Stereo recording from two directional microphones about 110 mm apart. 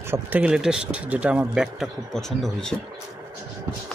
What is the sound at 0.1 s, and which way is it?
Speech, 15° right (ahead or behind).